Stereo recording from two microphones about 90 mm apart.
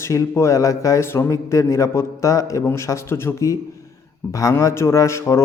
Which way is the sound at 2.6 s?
25° left (ahead or behind).